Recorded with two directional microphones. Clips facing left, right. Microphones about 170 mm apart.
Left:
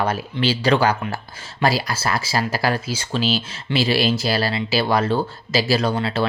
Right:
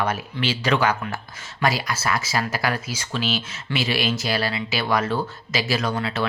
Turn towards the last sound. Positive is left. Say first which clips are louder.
# left 4 dB
turn(degrees=30)  # may be behind; listen again after turning